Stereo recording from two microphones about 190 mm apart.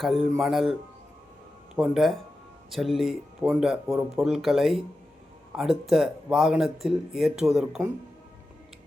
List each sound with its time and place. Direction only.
0.0 s speech: centre (ahead or behind)